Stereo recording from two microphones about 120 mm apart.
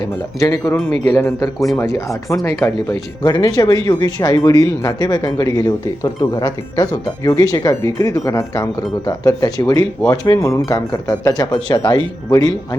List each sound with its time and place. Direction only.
0.3 s speech: 30° left (ahead or behind)
1.5 s speech: centre (ahead or behind)
2.3 s speech: 25° left (ahead or behind)
3.2 s speech: 35° left (ahead or behind)